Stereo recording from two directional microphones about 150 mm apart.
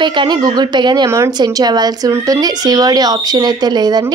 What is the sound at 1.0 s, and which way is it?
Speech, 20° right (ahead or behind).